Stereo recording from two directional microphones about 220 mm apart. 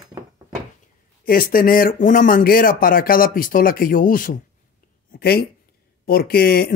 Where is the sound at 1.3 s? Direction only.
40° left (ahead or behind).